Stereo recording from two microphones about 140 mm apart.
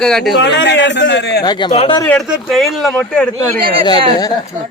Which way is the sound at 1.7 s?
45° left (ahead or behind).